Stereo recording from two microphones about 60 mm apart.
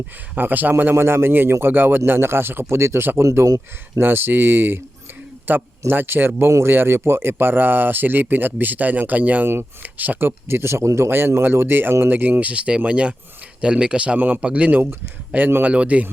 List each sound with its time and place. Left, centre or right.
0.3 s speech: right
4.0 s speech: right
11.1 s speech: right; by 14.2 s centre
14.2 s speech: right
14.8 s speech: right
15.6 s speech: right